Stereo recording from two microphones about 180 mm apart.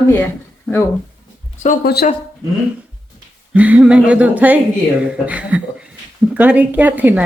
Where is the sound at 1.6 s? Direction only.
55° left (ahead or behind).